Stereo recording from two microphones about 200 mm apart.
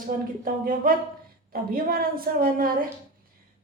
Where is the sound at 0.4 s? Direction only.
45° right (ahead or behind).